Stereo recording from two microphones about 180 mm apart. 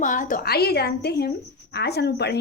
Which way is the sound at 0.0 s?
45° left (ahead or behind).